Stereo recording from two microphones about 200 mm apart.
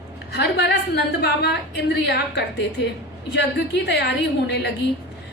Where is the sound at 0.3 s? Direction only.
55° left (ahead or behind).